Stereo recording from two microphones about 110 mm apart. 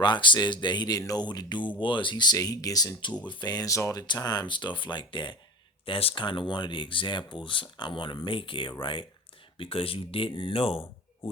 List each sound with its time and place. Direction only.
0.0 s speech: 45° left (ahead or behind); by 4.0 s 30° left (ahead or behind)
4.0 s speech: 40° left (ahead or behind)
5.8 s speech: 55° left (ahead or behind)